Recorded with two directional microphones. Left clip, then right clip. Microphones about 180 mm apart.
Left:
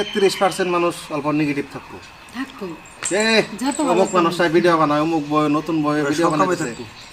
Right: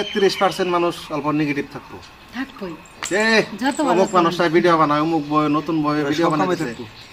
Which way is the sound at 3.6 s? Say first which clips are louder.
Right 1 dB; 10° right (ahead or behind).